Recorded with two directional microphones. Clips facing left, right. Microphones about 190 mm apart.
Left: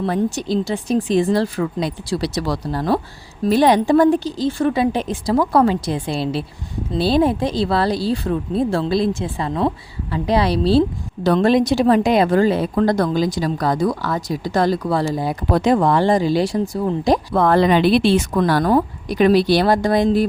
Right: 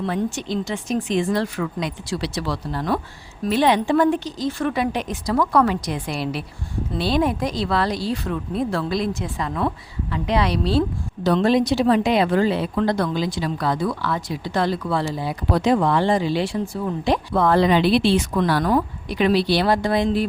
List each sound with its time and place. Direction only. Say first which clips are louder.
0.0 s speech: left 4 dB; 40° left (ahead or behind)
11.2 s speech: left 3 dB; 55° left (ahead or behind)